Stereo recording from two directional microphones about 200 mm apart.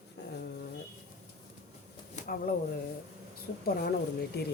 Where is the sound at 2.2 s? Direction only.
45° left (ahead or behind).